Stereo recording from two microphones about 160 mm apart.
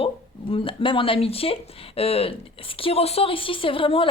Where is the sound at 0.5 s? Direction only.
35° left (ahead or behind).